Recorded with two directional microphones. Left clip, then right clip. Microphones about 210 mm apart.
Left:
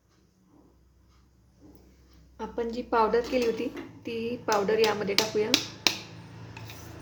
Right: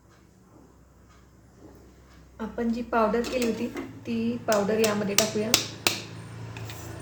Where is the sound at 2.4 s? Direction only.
50° left (ahead or behind).